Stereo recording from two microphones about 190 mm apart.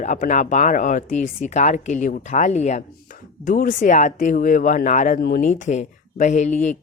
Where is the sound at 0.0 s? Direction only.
40° left (ahead or behind).